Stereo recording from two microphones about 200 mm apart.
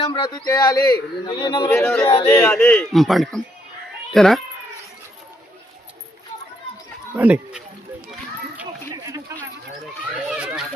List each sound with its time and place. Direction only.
0.0 s speech: 25° left (ahead or behind)
1.7 s a man's voice: 10° left (ahead or behind)
7.2 s speech: 5° right (ahead or behind)
10.2 s children playing: 5° right (ahead or behind)